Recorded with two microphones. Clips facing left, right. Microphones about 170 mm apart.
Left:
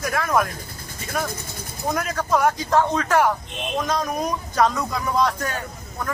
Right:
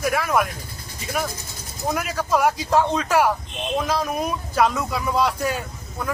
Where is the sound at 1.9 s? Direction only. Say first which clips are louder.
Even; 10° right (ahead or behind).